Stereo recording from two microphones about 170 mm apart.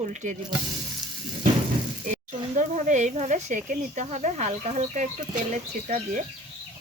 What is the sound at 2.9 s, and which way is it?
Speech, 45° right (ahead or behind).